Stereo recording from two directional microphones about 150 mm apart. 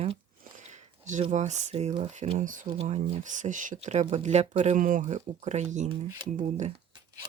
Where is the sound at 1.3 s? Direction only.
50° right (ahead or behind).